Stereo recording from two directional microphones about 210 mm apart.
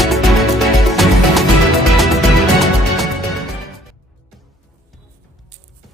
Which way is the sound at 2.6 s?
Centre (ahead or behind).